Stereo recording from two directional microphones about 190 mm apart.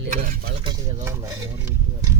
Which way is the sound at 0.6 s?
30° right (ahead or behind).